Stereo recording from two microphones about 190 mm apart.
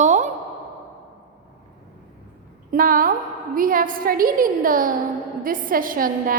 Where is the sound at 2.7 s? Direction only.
45° right (ahead or behind).